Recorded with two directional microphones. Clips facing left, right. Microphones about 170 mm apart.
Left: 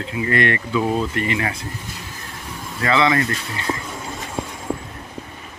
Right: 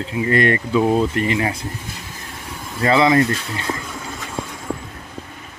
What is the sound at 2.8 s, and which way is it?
Speech, 35° right (ahead or behind).